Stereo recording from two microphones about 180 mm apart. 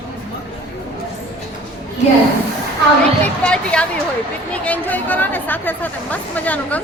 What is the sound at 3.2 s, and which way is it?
Speech, 5° left (ahead or behind).